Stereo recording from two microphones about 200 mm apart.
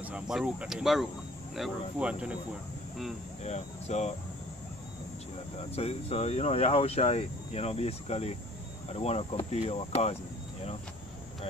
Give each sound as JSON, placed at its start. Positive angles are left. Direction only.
{"t": 0.0, "sound": "speech", "side_deg": -5}
{"t": 3.4, "sound": "speech", "side_deg": 35}
{"t": 5.6, "sound": "speech", "side_deg": 30}